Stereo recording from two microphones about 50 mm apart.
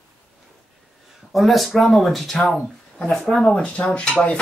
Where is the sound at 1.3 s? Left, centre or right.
Centre; by 4.2 s left.